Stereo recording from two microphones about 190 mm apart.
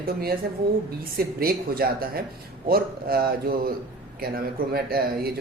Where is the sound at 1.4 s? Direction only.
50° right (ahead or behind).